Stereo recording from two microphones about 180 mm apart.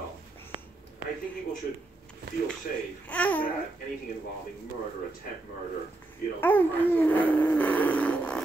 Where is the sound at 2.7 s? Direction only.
50° left (ahead or behind).